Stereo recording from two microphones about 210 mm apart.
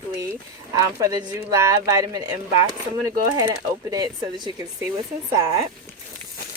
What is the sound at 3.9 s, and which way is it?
Speech, 20° right (ahead or behind).